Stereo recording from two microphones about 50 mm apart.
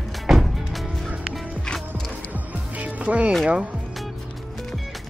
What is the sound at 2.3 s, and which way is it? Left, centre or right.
Music, right.